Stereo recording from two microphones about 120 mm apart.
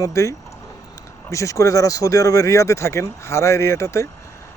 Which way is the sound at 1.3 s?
25° left (ahead or behind).